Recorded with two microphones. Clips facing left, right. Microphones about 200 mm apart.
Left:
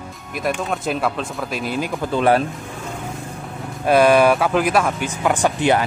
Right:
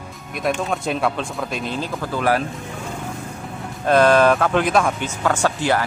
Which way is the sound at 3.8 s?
10° left (ahead or behind).